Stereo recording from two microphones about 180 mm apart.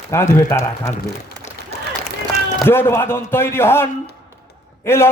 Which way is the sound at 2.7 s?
15° left (ahead or behind).